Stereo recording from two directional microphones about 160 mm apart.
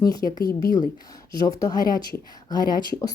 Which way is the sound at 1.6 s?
20° left (ahead or behind).